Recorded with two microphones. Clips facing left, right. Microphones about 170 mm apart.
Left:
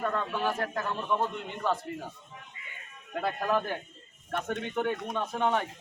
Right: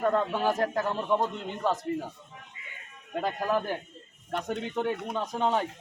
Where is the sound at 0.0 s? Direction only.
25° right (ahead or behind).